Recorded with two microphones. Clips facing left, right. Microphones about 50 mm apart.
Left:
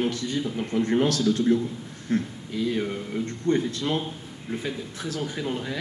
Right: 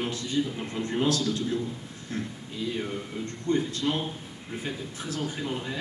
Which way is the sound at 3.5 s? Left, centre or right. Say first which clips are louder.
Left 2 dB; left.